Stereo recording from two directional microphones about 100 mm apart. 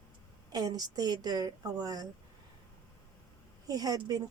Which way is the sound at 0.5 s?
40° right (ahead or behind).